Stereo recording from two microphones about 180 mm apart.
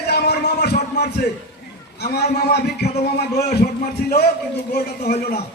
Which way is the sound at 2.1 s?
60° left (ahead or behind).